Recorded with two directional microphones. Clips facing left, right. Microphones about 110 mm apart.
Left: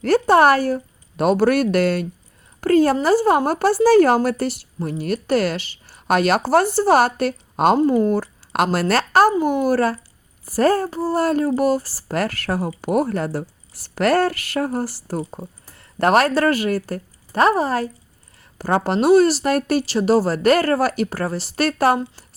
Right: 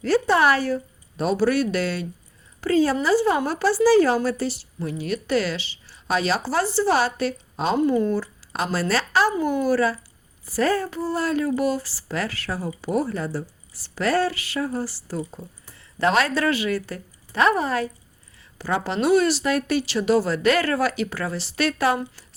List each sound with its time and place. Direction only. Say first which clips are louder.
0.0 s speech: left 5 dB; 50° left (ahead or behind)
1.1 s speech: left 4 dB; 60° left (ahead or behind)
4.8 s speech: left 4 dB; 45° left (ahead or behind)
7.8 s speech: left 4 dB; 40° left (ahead or behind)